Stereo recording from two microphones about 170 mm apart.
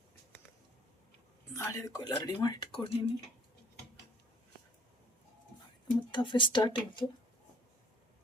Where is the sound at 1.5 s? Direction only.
20° left (ahead or behind).